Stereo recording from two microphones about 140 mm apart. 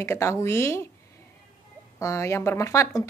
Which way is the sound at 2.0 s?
20° left (ahead or behind).